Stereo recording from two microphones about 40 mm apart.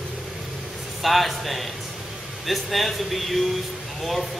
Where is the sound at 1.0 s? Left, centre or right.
Centre.